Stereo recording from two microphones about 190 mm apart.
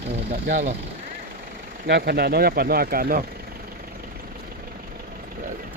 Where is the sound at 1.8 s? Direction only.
60° right (ahead or behind).